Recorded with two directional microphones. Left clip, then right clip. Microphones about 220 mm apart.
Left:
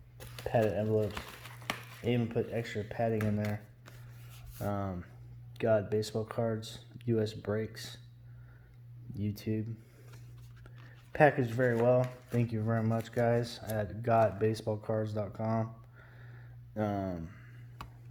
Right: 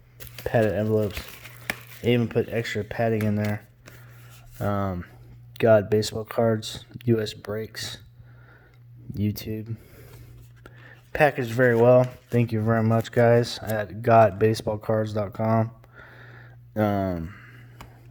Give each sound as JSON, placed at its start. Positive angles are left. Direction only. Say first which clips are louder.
{"t": 0.2, "sound": "a sound", "louder": "right 7 dB", "side_deg": -50}
{"t": 2.0, "sound": "speech", "louder": "right 10 dB", "side_deg": -45}
{"t": 4.5, "sound": "speech", "louder": "right 9 dB", "side_deg": -35}
{"t": 9.1, "sound": "speech", "louder": "right 6 dB", "side_deg": -40}